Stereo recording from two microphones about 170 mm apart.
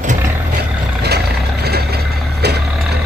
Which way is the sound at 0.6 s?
70° right (ahead or behind).